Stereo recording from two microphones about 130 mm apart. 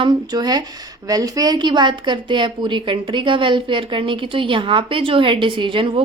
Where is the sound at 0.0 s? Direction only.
35° right (ahead or behind).